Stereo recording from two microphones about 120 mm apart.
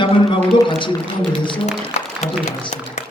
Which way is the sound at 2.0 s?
75° left (ahead or behind).